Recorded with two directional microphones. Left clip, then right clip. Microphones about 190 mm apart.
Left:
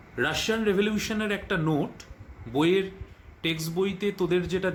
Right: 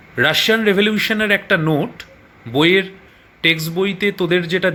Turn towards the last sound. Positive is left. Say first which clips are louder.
# right 10 dB
turn(degrees=-20)  # may be behind; listen again after turning